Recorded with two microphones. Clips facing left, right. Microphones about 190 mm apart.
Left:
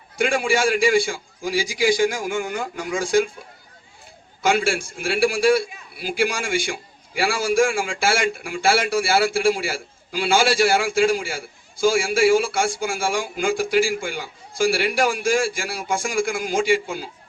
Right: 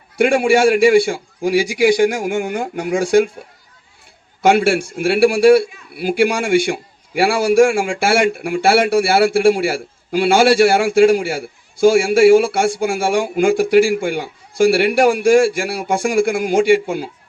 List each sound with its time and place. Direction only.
0.2 s a man's voice: 60° right (ahead or behind)
4.4 s a man's voice: 65° right (ahead or behind)